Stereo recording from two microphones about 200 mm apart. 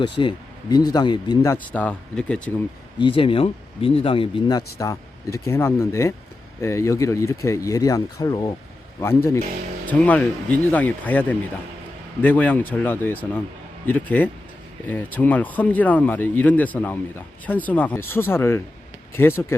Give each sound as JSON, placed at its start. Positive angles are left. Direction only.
{"t": 0.2, "sound": "speech", "side_deg": 20}
{"t": 3.0, "sound": "speech", "side_deg": 25}